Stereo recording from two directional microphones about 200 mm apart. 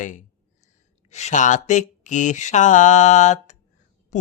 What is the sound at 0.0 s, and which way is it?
Speech, 40° left (ahead or behind).